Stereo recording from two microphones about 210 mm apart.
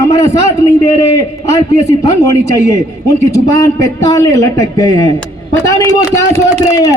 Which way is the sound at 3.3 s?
15° left (ahead or behind).